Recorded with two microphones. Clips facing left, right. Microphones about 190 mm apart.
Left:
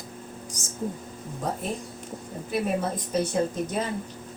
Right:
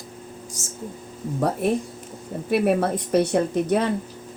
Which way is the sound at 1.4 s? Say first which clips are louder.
Right 9 dB; 70° right (ahead or behind).